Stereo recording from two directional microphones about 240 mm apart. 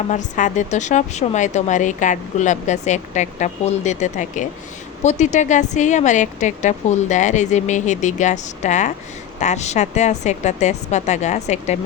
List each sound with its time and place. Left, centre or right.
0.1 s speech: left